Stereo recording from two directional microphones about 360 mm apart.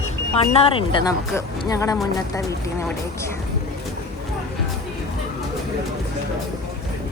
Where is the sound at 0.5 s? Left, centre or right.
Centre.